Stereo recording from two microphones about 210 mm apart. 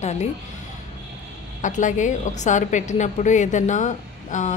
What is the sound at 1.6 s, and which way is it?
A woman's voice, 35° left (ahead or behind).